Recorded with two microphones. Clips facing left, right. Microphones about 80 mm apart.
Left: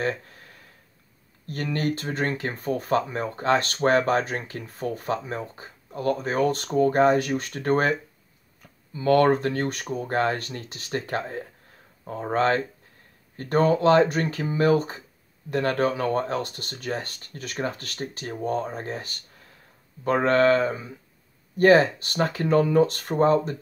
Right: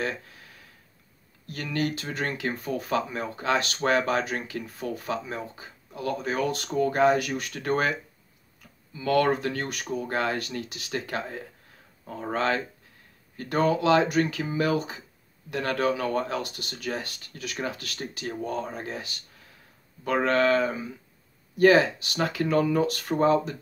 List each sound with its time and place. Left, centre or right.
0.0 s a sound: left
1.4 s speech: left
8.9 s speech: left